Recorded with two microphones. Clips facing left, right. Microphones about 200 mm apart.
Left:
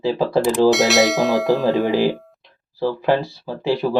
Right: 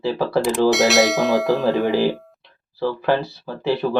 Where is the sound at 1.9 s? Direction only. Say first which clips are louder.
Left 1 dB; 15° left (ahead or behind).